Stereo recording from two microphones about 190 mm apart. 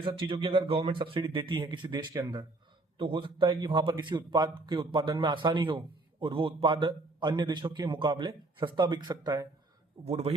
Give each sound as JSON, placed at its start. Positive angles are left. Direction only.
{"t": 0.0, "sound": "a man's voice", "side_deg": -25}
{"t": 10.0, "sound": "a man's voice", "side_deg": -35}